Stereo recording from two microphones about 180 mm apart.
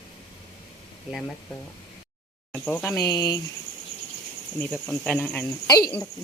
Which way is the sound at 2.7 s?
15° left (ahead or behind).